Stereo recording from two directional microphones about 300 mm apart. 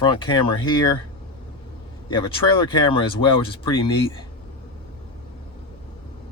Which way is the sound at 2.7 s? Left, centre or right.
Centre.